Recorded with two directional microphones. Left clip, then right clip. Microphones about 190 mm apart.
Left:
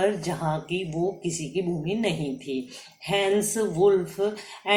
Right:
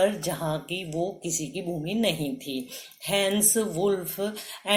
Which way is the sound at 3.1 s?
40° right (ahead or behind).